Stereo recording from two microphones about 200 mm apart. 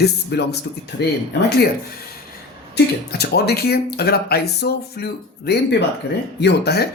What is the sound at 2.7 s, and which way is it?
Speech, 55° left (ahead or behind).